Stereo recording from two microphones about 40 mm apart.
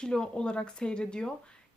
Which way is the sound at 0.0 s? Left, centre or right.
Centre.